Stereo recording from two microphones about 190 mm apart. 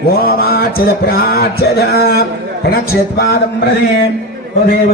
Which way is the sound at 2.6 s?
55° left (ahead or behind).